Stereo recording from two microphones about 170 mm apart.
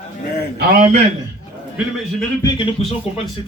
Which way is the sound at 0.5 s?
60° right (ahead or behind).